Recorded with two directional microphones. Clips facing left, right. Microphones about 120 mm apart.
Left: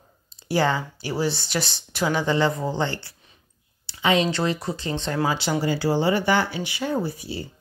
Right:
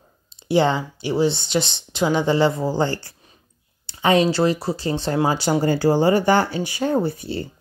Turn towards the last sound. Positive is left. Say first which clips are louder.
# right 5 dB
turn(degrees=-55)  # may be behind; listen again after turning